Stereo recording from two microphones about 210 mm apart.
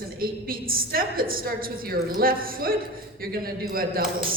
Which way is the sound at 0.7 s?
45° right (ahead or behind).